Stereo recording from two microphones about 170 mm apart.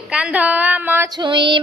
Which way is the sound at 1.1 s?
25° right (ahead or behind).